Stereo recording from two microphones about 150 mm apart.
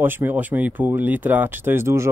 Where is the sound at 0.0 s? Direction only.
15° right (ahead or behind).